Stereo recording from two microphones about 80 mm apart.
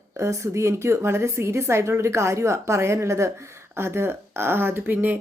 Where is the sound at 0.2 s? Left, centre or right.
Right.